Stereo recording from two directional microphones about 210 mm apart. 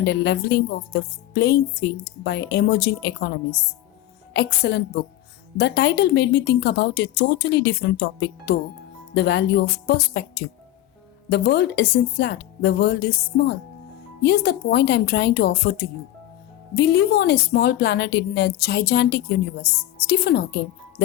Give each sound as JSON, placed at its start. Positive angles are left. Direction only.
{"t": 0.0, "sound": "speech", "side_deg": 50}
{"t": 4.4, "sound": "speech", "side_deg": 50}